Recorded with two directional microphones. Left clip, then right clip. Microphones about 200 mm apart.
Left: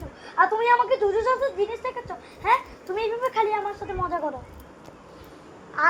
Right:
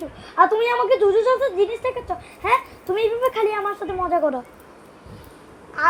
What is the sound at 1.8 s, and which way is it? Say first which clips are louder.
Speech: right 6 dB; 50° right (ahead or behind).